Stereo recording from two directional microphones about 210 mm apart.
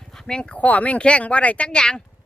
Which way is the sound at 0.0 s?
Centre (ahead or behind).